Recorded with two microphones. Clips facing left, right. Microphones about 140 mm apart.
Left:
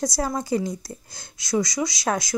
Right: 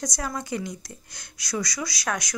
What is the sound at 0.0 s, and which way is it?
A woman's voice, 30° left (ahead or behind).